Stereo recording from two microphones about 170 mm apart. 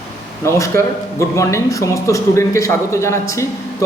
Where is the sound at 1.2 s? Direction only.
15° left (ahead or behind).